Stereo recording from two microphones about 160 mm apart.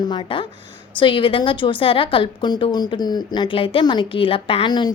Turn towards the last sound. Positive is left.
turn(degrees=30)  # may be behind; listen again after turning